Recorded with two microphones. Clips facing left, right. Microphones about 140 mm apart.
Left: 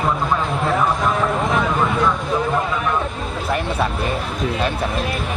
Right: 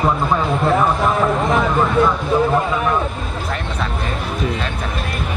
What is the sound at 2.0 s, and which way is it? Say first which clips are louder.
Speech: right 5 dB; 30° right (ahead or behind).